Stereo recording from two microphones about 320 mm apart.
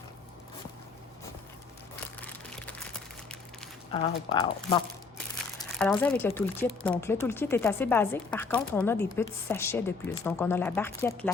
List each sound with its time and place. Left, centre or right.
2.2 s a sound: centre
4.0 s speech: centre
5.5 s speech: centre